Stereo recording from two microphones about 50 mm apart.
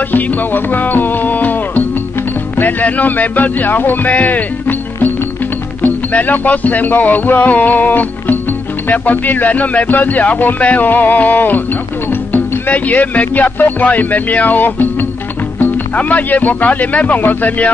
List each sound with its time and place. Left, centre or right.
0.1 s music: left
2.8 s music: left
6.1 s speech: left
12.1 s music: left
16.0 s speech: left